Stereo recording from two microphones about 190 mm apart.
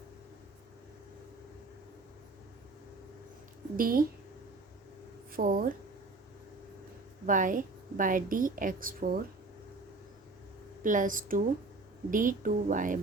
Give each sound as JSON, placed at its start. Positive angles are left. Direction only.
{"t": 3.8, "sound": "a woman's voice", "side_deg": -50}
{"t": 5.3, "sound": "speech", "side_deg": -45}
{"t": 7.3, "sound": "a woman's voice", "side_deg": -45}
{"t": 10.8, "sound": "a woman's voice", "side_deg": -45}